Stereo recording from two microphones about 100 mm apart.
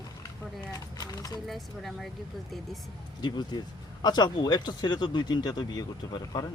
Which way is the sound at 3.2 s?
50° left (ahead or behind).